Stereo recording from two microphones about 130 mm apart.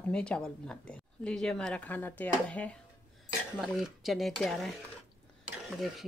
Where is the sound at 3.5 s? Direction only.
5° right (ahead or behind).